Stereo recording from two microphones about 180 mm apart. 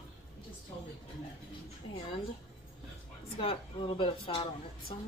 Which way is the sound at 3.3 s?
30° left (ahead or behind).